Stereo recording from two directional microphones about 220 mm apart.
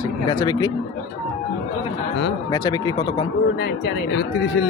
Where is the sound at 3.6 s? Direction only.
50° left (ahead or behind).